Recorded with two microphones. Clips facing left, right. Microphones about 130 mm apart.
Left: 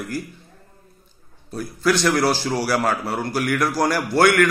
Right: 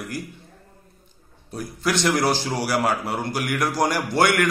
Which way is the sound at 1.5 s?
20° right (ahead or behind).